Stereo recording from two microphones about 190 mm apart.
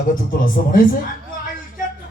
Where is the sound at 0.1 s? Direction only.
45° left (ahead or behind).